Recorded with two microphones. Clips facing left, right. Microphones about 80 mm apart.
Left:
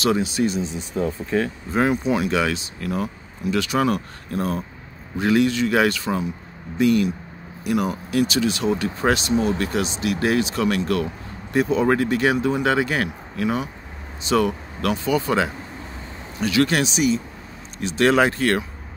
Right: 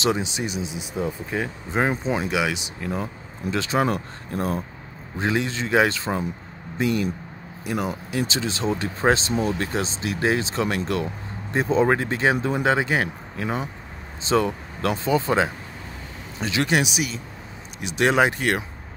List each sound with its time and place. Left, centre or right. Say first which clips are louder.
0.0 s speech: left 4 dB; right